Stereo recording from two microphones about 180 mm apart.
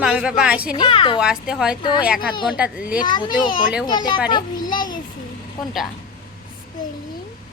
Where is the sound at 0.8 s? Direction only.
30° left (ahead or behind).